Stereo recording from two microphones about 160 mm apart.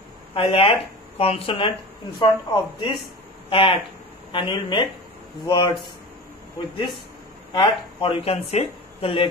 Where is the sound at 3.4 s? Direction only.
30° left (ahead or behind).